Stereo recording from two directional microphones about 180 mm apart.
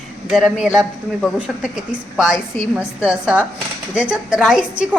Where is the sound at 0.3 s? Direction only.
5° right (ahead or behind).